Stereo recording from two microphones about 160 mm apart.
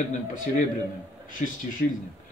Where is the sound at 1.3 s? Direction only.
55° left (ahead or behind).